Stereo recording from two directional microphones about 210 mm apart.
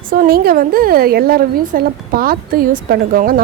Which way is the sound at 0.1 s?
45° right (ahead or behind).